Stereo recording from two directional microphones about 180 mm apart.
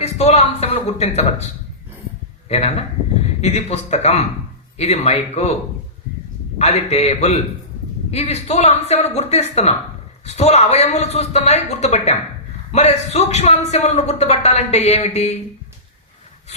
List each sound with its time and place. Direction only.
0.0 s speech: 35° left (ahead or behind)
2.5 s a man's voice: 35° left (ahead or behind)
6.6 s a man's voice: 35° left (ahead or behind)